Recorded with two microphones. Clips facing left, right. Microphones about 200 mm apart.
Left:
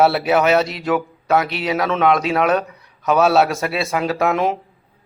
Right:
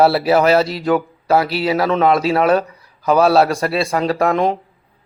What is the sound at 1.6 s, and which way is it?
Speech, centre (ahead or behind).